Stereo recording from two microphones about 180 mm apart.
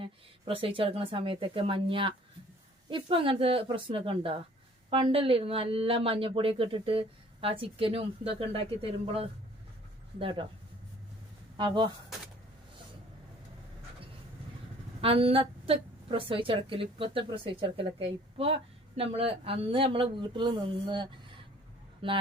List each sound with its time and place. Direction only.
0.0 s a woman's voice: 30° right (ahead or behind)
11.5 s speech: 25° right (ahead or behind)
15.0 s a woman's voice: 30° right (ahead or behind)